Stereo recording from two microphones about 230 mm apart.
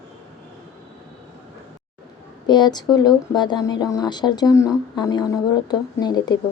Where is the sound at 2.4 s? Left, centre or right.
Centre.